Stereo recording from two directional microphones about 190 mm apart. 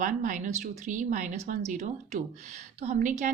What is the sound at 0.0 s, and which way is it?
A woman's voice, 45° right (ahead or behind).